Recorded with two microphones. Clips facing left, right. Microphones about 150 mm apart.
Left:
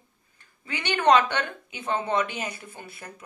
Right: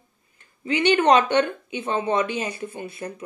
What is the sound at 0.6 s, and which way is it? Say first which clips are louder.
Speech: right 5 dB; 15° right (ahead or behind).